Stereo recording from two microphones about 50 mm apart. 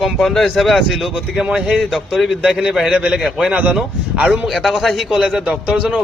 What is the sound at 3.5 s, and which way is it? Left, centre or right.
Speech, right.